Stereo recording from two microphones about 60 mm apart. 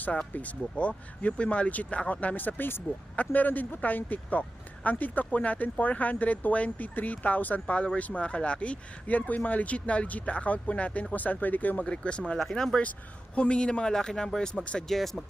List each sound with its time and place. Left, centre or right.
0.0 s speech: left
12.4 s a man's voice: centre
13.3 s a man's voice: centre
14.8 s speech: centre